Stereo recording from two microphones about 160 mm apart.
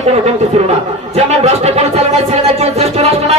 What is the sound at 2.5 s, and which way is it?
Music, 40° right (ahead or behind).